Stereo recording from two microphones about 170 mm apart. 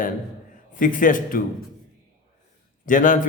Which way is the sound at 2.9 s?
50° left (ahead or behind).